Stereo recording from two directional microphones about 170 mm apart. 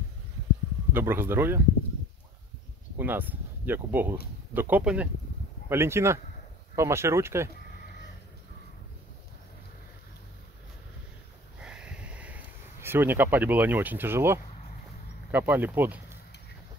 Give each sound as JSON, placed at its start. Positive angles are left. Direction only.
{"t": 0.9, "sound": "speech", "side_deg": -15}
{"t": 3.0, "sound": "speech", "side_deg": -10}
{"t": 11.6, "sound": "sniff", "side_deg": -5}
{"t": 12.8, "sound": "speech", "side_deg": -10}